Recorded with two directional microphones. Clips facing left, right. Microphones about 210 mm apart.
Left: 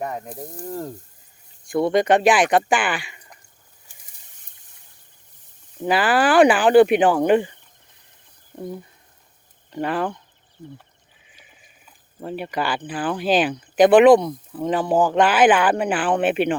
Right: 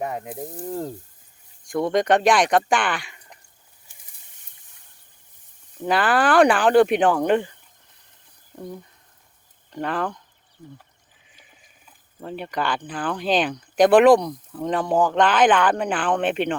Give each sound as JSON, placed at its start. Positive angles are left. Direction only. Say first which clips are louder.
{"t": 0.0, "sound": "speech", "louder": "right 1 dB", "side_deg": -5}
{"t": 0.6, "sound": "mechanisms", "louder": "right 1 dB", "side_deg": -15}
{"t": 1.6, "sound": "speech", "louder": "left 2 dB", "side_deg": 5}
{"t": 5.8, "sound": "speech", "louder": "left 1 dB", "side_deg": 5}
{"t": 9.6, "sound": "speech", "louder": "left 2 dB", "side_deg": 5}
{"t": 12.2, "sound": "speech", "louder": "left 2 dB", "side_deg": 5}